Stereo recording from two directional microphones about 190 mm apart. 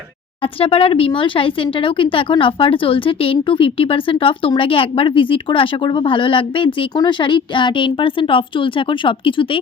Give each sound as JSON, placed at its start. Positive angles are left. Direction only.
{"t": 0.6, "sound": "a woman's voice", "side_deg": 30}